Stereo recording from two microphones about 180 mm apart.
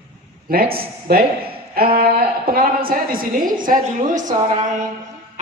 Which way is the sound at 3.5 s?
50° right (ahead or behind).